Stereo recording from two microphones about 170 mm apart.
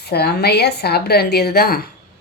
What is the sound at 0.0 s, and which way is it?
A woman's voice, 70° left (ahead or behind).